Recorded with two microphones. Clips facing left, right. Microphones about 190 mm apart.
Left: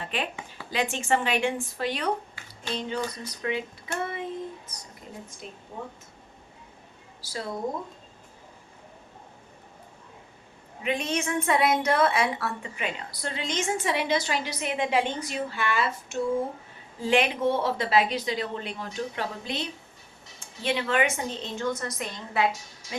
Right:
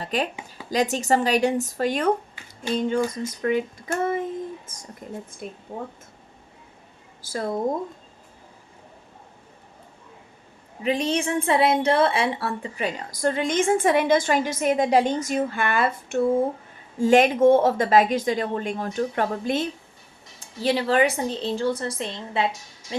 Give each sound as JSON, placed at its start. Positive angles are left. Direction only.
{"t": 0.0, "sound": "a woman's voice", "side_deg": -40}
{"t": 4.0, "sound": "child singing", "side_deg": -45}
{"t": 5.4, "sound": "a woman's voice", "side_deg": -50}
{"t": 7.2, "sound": "a woman's voice", "side_deg": -50}
{"t": 10.8, "sound": "a woman's voice", "side_deg": -35}
{"t": 17.0, "sound": "a woman's voice", "side_deg": -45}
{"t": 20.4, "sound": "a woman's voice", "side_deg": -35}